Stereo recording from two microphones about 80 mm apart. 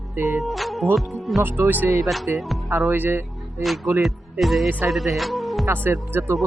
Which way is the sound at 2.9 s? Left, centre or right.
Right.